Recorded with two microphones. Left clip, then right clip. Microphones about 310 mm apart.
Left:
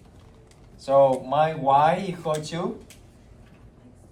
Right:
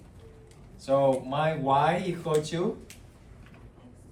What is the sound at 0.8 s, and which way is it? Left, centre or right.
Speech, centre.